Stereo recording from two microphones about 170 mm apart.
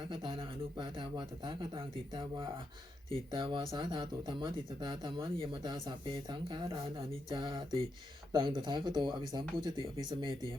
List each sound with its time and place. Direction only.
0.1 s speech: 30° right (ahead or behind)